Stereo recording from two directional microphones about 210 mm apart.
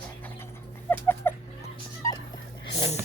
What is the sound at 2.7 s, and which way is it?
Speech, 30° left (ahead or behind).